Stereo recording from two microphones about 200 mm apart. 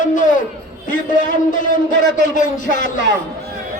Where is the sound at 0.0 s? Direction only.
40° left (ahead or behind).